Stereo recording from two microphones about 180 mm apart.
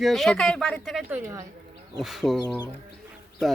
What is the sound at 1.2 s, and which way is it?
Speech, 15° right (ahead or behind).